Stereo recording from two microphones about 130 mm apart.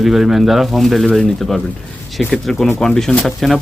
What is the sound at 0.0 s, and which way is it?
Speech, centre (ahead or behind).